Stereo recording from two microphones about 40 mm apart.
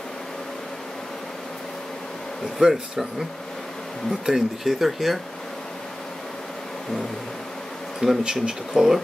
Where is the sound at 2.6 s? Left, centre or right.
Centre.